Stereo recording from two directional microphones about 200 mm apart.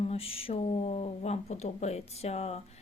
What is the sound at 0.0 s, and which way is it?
A woman's voice, 30° left (ahead or behind).